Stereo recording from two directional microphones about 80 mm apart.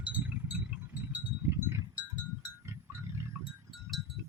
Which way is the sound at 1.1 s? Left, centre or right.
Right.